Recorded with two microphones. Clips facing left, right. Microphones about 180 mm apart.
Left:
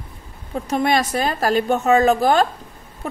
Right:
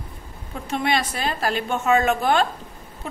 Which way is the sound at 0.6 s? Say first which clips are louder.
Left 4 dB; 45° left (ahead or behind).